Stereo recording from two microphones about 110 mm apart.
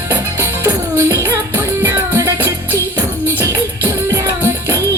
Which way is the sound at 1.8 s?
25° right (ahead or behind).